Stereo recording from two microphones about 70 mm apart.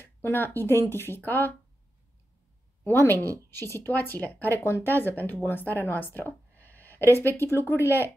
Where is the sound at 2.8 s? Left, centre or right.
Left.